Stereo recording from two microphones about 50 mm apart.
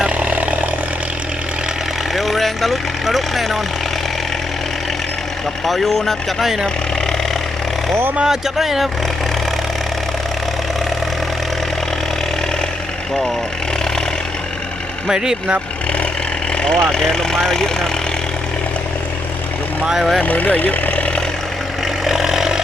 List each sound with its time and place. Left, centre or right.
0.0 s vehicle: right
2.1 s speech: centre
5.6 s speech: centre
8.1 s speech: centre
8.4 s speech: centre
15.0 s speech: centre
16.7 s speech: centre
19.9 s speech: centre
20.2 s speech: left
22.0 s vehicle: centre